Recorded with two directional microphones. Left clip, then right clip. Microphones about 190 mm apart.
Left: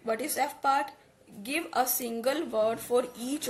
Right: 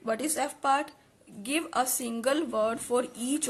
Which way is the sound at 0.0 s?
30° right (ahead or behind).